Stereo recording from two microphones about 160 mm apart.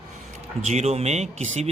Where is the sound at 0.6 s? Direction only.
45° right (ahead or behind).